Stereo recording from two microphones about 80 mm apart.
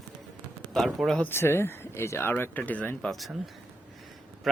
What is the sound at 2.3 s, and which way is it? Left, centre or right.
Speech, left.